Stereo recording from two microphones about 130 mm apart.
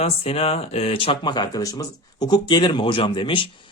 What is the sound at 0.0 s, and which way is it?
Speech, 50° left (ahead or behind).